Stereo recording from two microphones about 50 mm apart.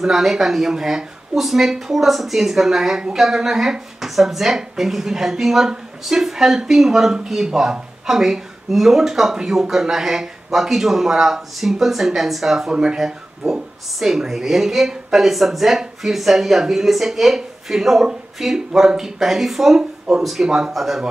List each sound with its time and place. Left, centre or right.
0.0 s a woman's voice: centre
12.7 s a woman's voice: centre
13.0 s a woman's voice: centre